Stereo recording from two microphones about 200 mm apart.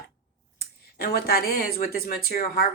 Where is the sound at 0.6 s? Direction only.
50° left (ahead or behind).